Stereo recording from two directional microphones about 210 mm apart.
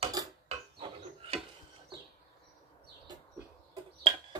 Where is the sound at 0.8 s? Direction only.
25° right (ahead or behind).